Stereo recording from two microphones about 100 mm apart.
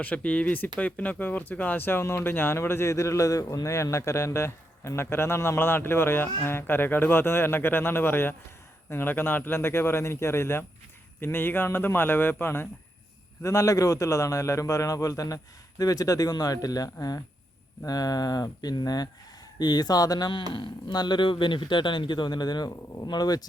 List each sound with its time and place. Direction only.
0.0 s a man's voice: 15° left (ahead or behind); by 20.4 s 40° left (ahead or behind)
20.5 s speech: 55° left (ahead or behind)